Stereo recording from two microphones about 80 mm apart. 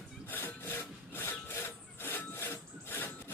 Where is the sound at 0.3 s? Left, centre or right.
Left.